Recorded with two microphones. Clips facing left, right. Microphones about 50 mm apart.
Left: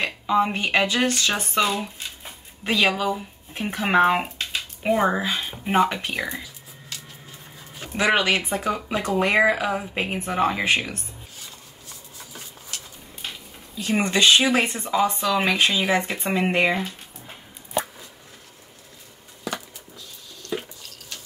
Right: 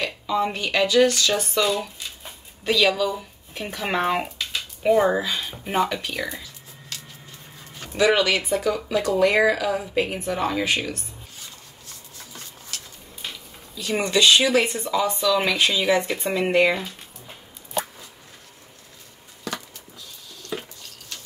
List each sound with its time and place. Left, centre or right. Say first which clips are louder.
0.0 s a woman's voice: left 2 dB; left
5.2 s speech: left 2 dB; left
6.3 s music: left 2 dB; centre
8.0 s speech: right 1 dB; left
11.3 s a sound: even; centre
13.7 s speech: even; left
19.5 s a sound: left 1 dB; centre